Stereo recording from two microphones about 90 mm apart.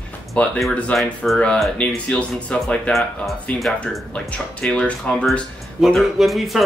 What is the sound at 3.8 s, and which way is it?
Speech, 15° left (ahead or behind).